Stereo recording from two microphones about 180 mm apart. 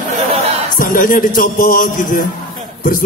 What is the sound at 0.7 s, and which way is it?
Speech, 50° left (ahead or behind).